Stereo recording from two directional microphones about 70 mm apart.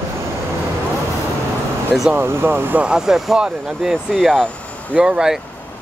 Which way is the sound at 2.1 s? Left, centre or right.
Right.